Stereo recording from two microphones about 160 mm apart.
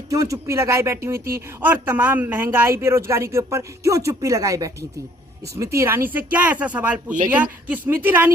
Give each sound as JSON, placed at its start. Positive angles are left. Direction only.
{"t": 0.1, "sound": "speech", "side_deg": -20}